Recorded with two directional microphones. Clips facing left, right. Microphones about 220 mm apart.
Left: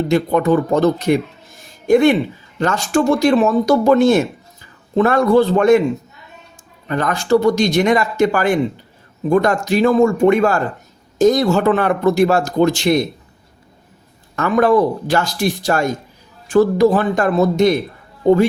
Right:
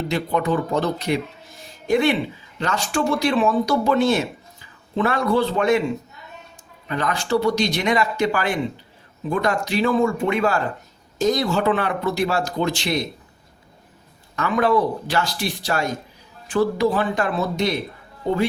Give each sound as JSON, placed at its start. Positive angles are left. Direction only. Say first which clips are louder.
{"t": 0.1, "sound": "a man's voice", "louder": "left 7 dB", "side_deg": 45}
{"t": 6.8, "sound": "a man's voice", "louder": "left 5 dB", "side_deg": 50}
{"t": 14.3, "sound": "a man's voice", "louder": "left 6 dB", "side_deg": 50}